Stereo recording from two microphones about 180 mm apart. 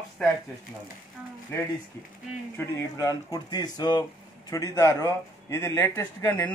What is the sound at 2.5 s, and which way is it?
A man's voice, 15° left (ahead or behind).